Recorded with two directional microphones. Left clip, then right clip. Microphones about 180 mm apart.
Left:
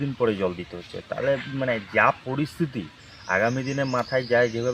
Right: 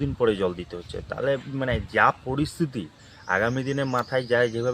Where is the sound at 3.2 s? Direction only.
25° right (ahead or behind).